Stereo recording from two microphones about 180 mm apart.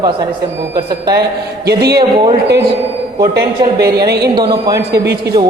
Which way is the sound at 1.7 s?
65° right (ahead or behind).